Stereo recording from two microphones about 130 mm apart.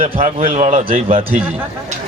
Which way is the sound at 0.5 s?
60° right (ahead or behind).